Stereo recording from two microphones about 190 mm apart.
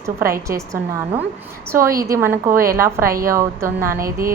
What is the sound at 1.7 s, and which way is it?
A woman's voice, 15° right (ahead or behind).